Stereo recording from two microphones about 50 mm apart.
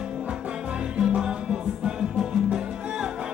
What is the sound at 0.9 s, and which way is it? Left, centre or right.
Music, centre.